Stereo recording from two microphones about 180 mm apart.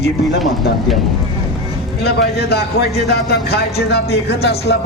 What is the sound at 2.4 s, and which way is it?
Speech, 65° left (ahead or behind).